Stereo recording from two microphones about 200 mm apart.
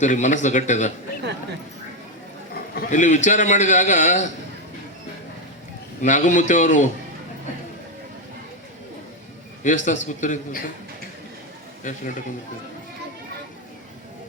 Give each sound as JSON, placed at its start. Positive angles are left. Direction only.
{"t": 0.0, "sound": "a man's voice", "side_deg": 40}
{"t": 2.7, "sound": "a man's voice", "side_deg": 40}
{"t": 6.0, "sound": "a man's voice", "side_deg": 40}
{"t": 9.6, "sound": "a man's voice", "side_deg": 40}
{"t": 11.8, "sound": "a man's voice", "side_deg": 40}